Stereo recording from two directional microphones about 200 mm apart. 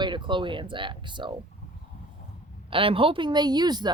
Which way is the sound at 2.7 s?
25° right (ahead or behind).